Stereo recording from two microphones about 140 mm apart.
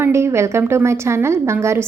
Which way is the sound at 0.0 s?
20° right (ahead or behind).